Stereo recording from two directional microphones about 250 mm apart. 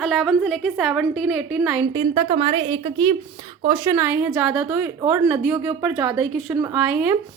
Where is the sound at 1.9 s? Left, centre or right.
Centre.